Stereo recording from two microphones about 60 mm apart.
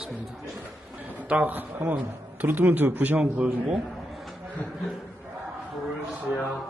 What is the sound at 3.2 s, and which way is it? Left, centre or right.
Speech, centre.